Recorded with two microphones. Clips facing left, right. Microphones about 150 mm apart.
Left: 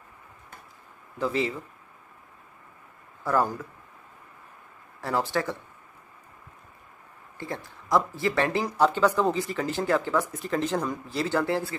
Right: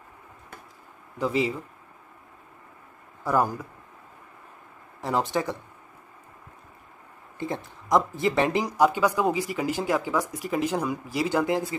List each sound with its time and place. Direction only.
1.1 s speech: 15° right (ahead or behind)
3.3 s speech: 15° right (ahead or behind)
5.0 s speech: 15° right (ahead or behind)
7.3 s speech: 20° right (ahead or behind)